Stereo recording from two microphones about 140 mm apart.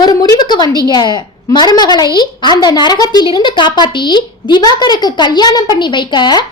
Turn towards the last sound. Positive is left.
turn(degrees=30)  # may be behind; listen again after turning